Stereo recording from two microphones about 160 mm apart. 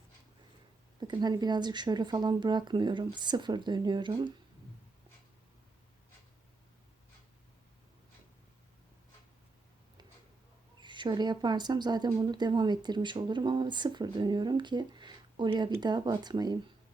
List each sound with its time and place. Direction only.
0.9 s speech: 25° right (ahead or behind)
10.8 s speech: 30° right (ahead or behind)